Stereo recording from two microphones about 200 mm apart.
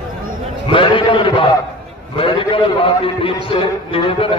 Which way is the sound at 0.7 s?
25° left (ahead or behind).